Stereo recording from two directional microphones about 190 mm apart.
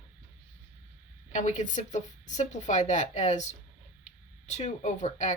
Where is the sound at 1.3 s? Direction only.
40° left (ahead or behind).